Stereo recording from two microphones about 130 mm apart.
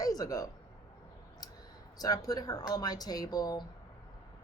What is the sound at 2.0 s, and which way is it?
Speech, 30° left (ahead or behind).